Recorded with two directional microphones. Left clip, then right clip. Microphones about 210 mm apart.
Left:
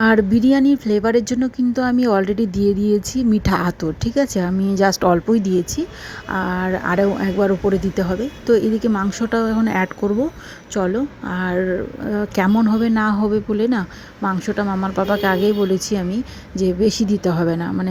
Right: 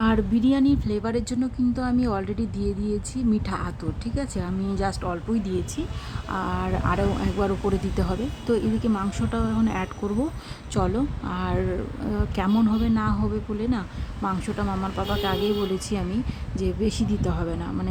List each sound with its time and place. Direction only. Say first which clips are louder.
0.0 s speech: left 8 dB; 20° left (ahead or behind)
6.3 s a woman's voice: left 7 dB; 20° left (ahead or behind)
10.8 s a woman's voice: left 5 dB; 10° left (ahead or behind)
12.3 s speech: left 6 dB; 20° left (ahead or behind)